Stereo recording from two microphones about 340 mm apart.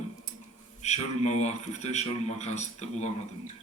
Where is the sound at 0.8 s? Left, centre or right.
Centre.